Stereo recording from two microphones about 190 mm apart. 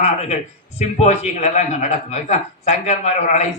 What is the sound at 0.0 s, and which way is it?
A man's voice, 35° left (ahead or behind).